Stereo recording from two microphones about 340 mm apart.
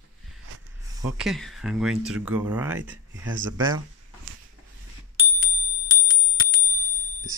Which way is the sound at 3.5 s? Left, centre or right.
Centre.